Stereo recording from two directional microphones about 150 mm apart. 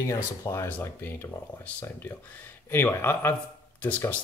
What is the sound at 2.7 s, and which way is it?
Speech, 15° left (ahead or behind).